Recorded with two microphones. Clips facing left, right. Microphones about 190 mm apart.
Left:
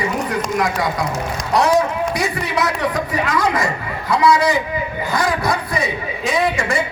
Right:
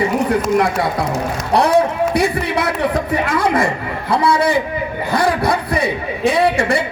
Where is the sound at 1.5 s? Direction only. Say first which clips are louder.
Right 2 dB; 30° right (ahead or behind).